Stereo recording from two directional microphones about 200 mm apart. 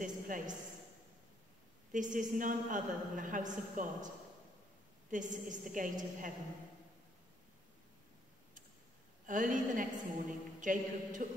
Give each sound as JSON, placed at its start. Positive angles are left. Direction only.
{"t": 0.0, "sound": "a man's voice", "side_deg": -40}
{"t": 1.9, "sound": "a woman's voice", "side_deg": -40}
{"t": 5.1, "sound": "a woman's voice", "side_deg": -40}
{"t": 9.2, "sound": "a woman's voice", "side_deg": -40}